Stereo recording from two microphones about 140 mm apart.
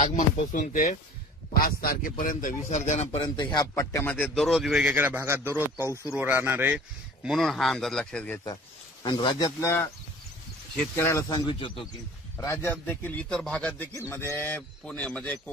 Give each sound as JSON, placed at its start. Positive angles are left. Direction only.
{"t": 0.0, "sound": "speech", "side_deg": 65}
{"t": 1.5, "sound": "a man's voice", "side_deg": 90}
{"t": 3.2, "sound": "a man's voice", "side_deg": 35}
{"t": 4.1, "sound": "a man's voice", "side_deg": 5}
{"t": 7.2, "sound": "speech", "side_deg": 0}
{"t": 9.0, "sound": "speech", "side_deg": 35}
{"t": 11.0, "sound": "speech", "side_deg": 20}
{"t": 12.4, "sound": "speech", "side_deg": 20}
{"t": 13.9, "sound": "speech", "side_deg": 20}